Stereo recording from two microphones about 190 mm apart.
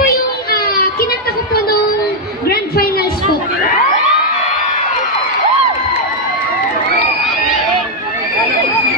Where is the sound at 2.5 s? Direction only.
55° left (ahead or behind).